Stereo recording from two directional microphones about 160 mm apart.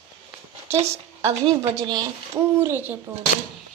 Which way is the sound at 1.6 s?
20° right (ahead or behind).